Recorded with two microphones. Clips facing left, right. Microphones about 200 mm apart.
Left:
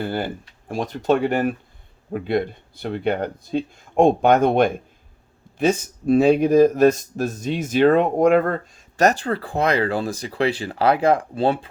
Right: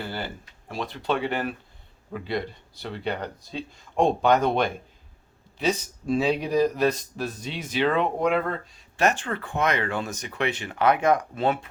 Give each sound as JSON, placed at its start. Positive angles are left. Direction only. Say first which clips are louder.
{"t": 0.0, "sound": "speech", "louder": "left 8 dB", "side_deg": 50}